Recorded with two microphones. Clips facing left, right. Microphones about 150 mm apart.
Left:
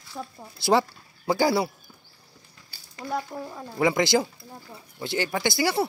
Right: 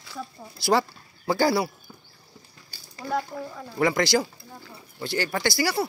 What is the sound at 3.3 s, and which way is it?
A man's voice, 15° left (ahead or behind).